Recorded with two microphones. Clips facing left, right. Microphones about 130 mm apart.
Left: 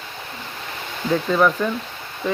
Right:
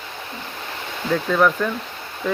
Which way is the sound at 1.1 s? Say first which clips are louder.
Left 1 dB; 15° left (ahead or behind).